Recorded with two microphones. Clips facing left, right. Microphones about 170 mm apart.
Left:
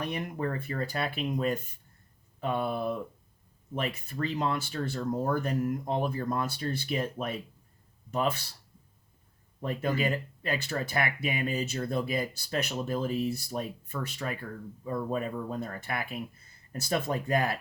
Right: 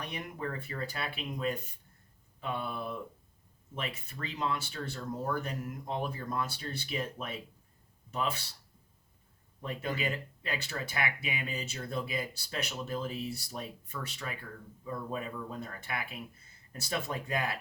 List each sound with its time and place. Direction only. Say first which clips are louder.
0.0 s speech: left 6 dB; 45° left (ahead or behind)
9.6 s speech: left 6 dB; 45° left (ahead or behind)